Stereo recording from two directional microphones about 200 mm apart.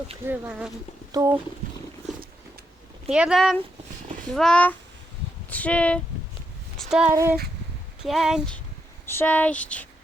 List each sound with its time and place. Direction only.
0.3 s speech: 5° right (ahead or behind)
1.1 s speech: 15° right (ahead or behind)
3.1 s speech: 5° right (ahead or behind)
6.7 s a sound: 5° right (ahead or behind)
7.1 s speech: 15° right (ahead or behind)
8.0 s speech: centre (ahead or behind)